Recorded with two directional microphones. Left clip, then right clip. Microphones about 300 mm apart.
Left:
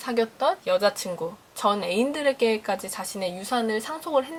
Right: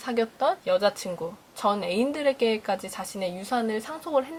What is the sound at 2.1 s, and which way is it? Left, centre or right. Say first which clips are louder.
Speech: left 1 dB; centre.